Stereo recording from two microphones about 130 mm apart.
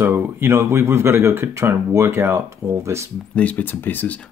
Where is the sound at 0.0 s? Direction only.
15° right (ahead or behind).